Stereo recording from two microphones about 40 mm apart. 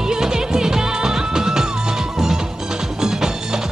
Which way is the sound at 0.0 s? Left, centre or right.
Centre.